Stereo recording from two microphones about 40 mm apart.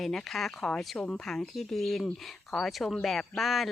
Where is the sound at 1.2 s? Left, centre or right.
Centre.